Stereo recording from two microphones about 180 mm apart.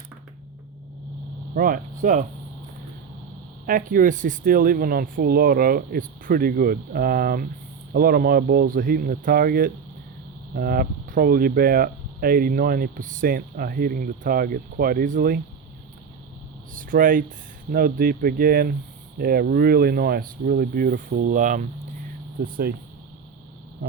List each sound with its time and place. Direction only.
1.5 s speech: 50° right (ahead or behind)
3.7 s speech: 50° right (ahead or behind)
16.7 s speech: 50° right (ahead or behind)